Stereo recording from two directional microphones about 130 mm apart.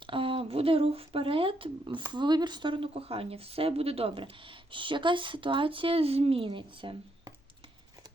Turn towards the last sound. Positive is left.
turn(degrees=-40)  # may be behind; listen again after turning